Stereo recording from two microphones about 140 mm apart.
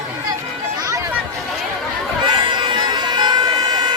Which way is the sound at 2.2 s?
35° right (ahead or behind).